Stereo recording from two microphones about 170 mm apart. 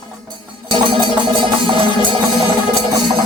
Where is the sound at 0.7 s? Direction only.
30° right (ahead or behind).